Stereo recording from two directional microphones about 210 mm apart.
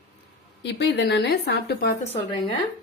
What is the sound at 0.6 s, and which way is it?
A woman's voice, 55° left (ahead or behind).